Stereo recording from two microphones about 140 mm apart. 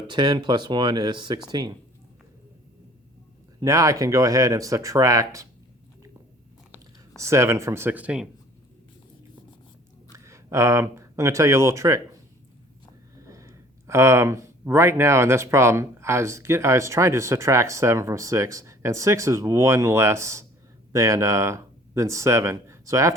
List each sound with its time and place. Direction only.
0.1 s speech: 30° right (ahead or behind)
3.6 s speech: 25° right (ahead or behind)
7.2 s speech: 20° right (ahead or behind)
10.1 s speech: 20° right (ahead or behind)
13.2 s speech: 20° right (ahead or behind)